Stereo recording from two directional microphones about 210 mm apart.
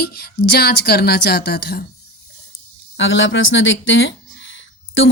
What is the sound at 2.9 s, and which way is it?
Speech, 60° left (ahead or behind).